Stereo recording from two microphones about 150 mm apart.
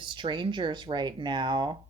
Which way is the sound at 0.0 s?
30° right (ahead or behind).